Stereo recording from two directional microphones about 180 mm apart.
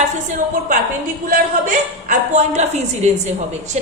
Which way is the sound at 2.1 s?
40° right (ahead or behind).